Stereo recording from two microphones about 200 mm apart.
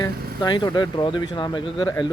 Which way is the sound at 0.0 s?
20° left (ahead or behind).